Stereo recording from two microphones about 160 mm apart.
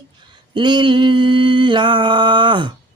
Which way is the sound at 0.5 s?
30° right (ahead or behind).